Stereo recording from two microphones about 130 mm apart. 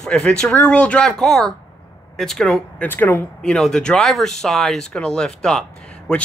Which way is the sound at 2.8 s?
15° left (ahead or behind).